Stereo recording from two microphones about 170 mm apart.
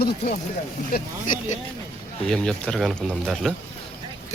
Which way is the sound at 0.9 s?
50° left (ahead or behind).